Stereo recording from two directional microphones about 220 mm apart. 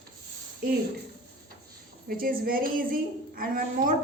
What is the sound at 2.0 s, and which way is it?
A woman's voice, 40° right (ahead or behind).